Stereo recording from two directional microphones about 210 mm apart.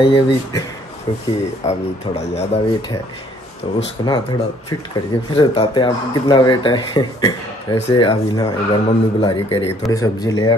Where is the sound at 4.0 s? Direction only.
20° left (ahead or behind).